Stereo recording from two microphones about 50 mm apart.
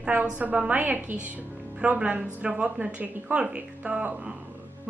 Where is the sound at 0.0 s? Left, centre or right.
Right.